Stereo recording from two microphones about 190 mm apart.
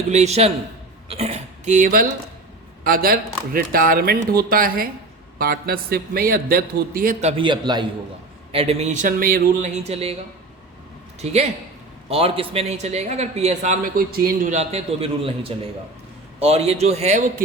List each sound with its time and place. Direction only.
0.1 s a man's voice: 35° right (ahead or behind)
11.2 s a man's voice: 35° right (ahead or behind); by 14.5 s 50° right (ahead or behind)
14.5 s a man's voice: 35° right (ahead or behind)